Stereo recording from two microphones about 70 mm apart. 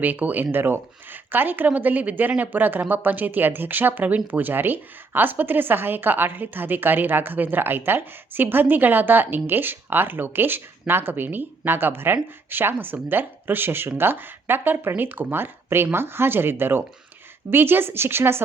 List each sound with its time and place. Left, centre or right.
0.0 s a woman's voice: right